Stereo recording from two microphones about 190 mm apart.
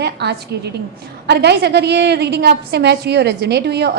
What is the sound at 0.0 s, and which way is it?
A woman's voice, 60° right (ahead or behind).